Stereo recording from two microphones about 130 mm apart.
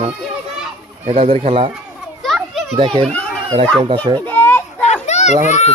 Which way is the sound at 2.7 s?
45° right (ahead or behind).